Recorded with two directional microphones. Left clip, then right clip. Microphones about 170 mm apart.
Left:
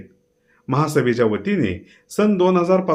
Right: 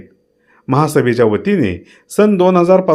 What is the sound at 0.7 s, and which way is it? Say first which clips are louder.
A man's voice: right 6 dB; 40° right (ahead or behind).